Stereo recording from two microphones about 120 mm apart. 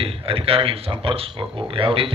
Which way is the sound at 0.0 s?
50° right (ahead or behind).